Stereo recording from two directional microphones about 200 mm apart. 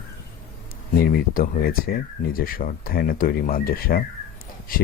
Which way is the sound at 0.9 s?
50° left (ahead or behind).